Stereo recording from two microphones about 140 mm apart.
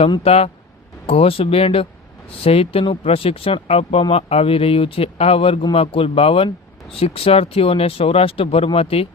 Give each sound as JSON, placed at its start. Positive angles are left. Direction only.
{"t": 0.1, "sound": "speech", "side_deg": 45}